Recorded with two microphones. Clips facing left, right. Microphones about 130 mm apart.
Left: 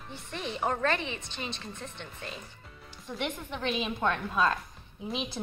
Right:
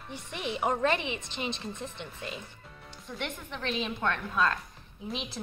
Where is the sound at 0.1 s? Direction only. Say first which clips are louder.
Right 2 dB; 15° right (ahead or behind).